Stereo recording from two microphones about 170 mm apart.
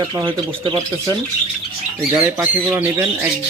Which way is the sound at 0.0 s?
25° right (ahead or behind).